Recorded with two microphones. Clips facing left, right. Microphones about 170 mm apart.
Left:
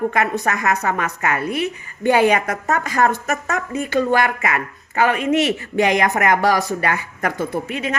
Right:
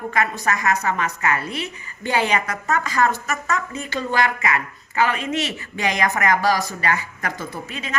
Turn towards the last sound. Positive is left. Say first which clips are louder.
# left 8 dB
turn(degrees=60)  # may be behind; listen again after turning